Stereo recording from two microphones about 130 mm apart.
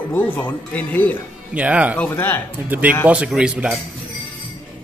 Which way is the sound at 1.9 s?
15° left (ahead or behind).